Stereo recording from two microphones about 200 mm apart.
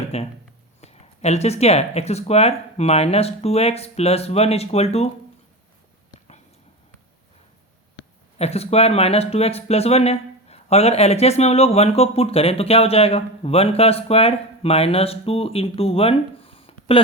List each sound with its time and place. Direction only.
0.1 s speech: 30° left (ahead or behind)
8.4 s speech: 30° left (ahead or behind)